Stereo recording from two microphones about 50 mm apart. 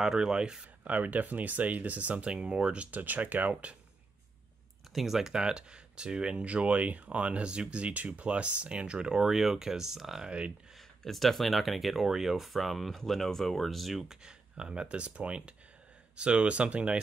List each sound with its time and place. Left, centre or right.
0.0 s speech: centre
0.8 s speech: right
4.9 s speech: centre
10.2 s speech: right
11.1 s speech: centre
14.0 s speech: centre